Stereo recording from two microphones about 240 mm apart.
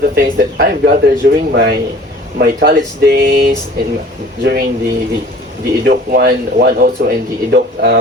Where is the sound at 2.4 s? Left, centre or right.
Right.